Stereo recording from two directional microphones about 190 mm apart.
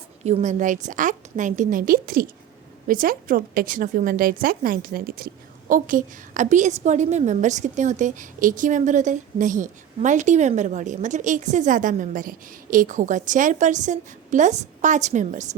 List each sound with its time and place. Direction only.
0.3 s a woman's voice: 35° right (ahead or behind)